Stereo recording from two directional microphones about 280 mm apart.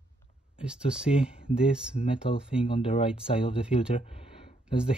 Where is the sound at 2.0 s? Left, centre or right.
Left.